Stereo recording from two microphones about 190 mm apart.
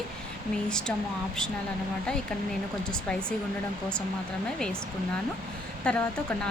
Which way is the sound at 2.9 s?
5° left (ahead or behind).